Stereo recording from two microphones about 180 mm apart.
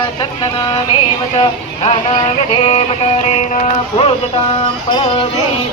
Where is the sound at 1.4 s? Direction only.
35° left (ahead or behind).